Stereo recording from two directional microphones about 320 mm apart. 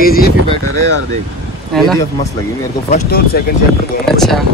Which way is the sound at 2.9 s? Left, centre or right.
Left.